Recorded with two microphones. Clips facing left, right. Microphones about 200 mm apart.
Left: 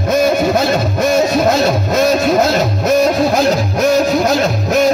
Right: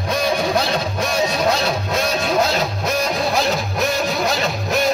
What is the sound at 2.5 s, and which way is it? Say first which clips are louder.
Music: left 8 dB; 45° left (ahead or behind).